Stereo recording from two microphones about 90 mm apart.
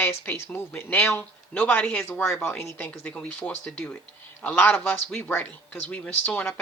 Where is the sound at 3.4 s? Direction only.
10° left (ahead or behind).